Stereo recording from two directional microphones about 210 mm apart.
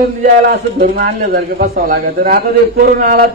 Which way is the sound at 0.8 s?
45° right (ahead or behind).